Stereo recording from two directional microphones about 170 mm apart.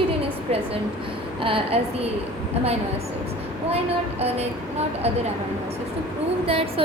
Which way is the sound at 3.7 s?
35° right (ahead or behind).